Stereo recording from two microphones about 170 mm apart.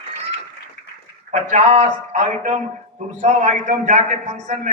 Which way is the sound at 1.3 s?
45° right (ahead or behind).